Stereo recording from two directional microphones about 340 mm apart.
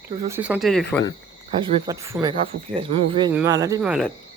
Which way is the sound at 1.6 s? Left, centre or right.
Centre.